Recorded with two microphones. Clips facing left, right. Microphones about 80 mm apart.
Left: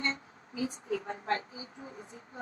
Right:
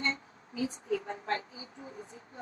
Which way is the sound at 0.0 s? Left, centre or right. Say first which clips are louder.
Right 1 dB; left.